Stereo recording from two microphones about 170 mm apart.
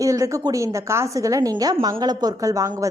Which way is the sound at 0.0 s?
20° right (ahead or behind).